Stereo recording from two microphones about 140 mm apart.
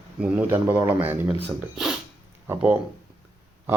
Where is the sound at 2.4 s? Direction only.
15° right (ahead or behind).